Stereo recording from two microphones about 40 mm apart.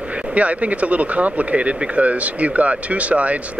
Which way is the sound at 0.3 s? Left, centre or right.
Right.